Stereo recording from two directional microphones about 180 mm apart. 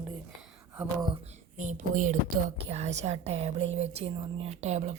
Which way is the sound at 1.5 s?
45° right (ahead or behind).